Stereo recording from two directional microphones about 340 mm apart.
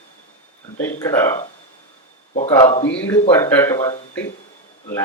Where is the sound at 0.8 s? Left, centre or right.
Centre.